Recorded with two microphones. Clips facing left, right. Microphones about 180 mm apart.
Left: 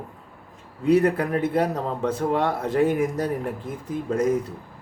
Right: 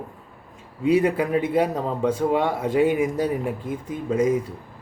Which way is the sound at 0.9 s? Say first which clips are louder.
Even; 10° right (ahead or behind).